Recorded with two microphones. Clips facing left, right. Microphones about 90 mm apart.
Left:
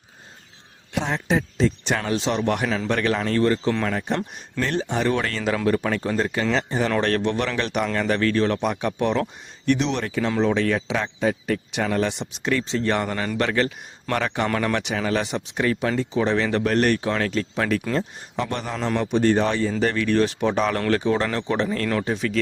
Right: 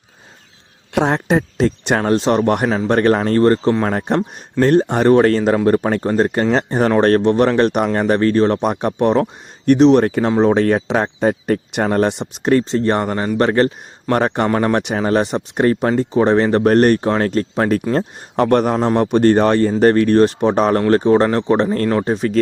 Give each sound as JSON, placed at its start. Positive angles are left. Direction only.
{"t": 0.9, "sound": "speech", "side_deg": -60}
{"t": 14.8, "sound": "speech", "side_deg": -40}
{"t": 17.9, "sound": "speech", "side_deg": -55}